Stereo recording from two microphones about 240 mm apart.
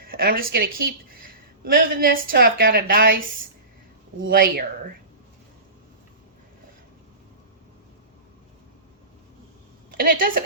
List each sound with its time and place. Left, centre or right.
0.0 s a woman's voice: right
4.3 s a woman's voice: right
9.9 s a woman's voice: right